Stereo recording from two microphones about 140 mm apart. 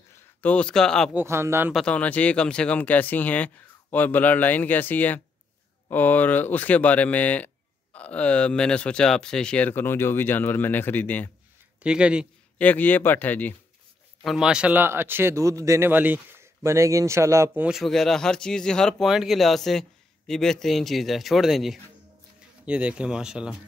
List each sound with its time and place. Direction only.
0.4 s speech: 10° left (ahead or behind)
1.1 s speech: 20° right (ahead or behind)
1.7 s speech: 5° left (ahead or behind)
11.8 s speech: 5° right (ahead or behind)
12.5 s speech: 10° left (ahead or behind)
14.2 s speech: 5° right (ahead or behind); by 17.6 s 20° right (ahead or behind)
17.6 s speech: centre (ahead or behind)